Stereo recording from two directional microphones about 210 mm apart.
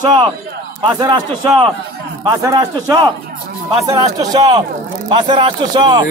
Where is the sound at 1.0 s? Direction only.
20° right (ahead or behind).